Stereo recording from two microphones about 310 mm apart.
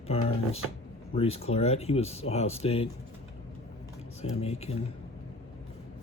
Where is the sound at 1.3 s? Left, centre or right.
Centre.